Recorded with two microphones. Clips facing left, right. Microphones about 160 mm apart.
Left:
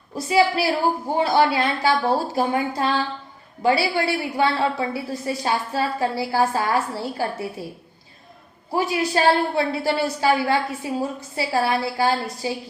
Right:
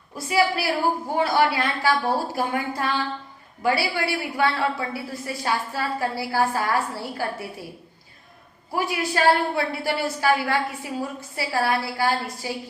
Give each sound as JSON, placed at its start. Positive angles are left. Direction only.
{"t": 0.3, "sound": "a woman's voice", "side_deg": 25}
{"t": 8.7, "sound": "a woman's voice", "side_deg": 20}